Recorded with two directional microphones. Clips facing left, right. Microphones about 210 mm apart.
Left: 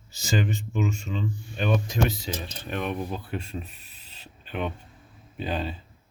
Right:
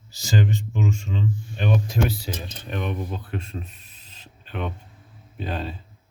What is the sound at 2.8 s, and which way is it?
Speech, 5° left (ahead or behind).